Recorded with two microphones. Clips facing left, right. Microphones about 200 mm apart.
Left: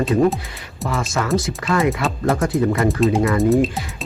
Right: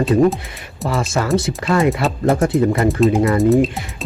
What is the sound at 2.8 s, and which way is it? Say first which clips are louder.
Speech: right 2 dB; centre (ahead or behind).